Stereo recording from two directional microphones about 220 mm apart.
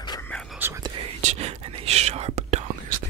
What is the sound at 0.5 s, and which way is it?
Whispering, 10° right (ahead or behind).